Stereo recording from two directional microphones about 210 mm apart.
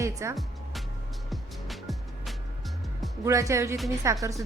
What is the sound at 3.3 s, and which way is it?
A woman's voice, 15° right (ahead or behind).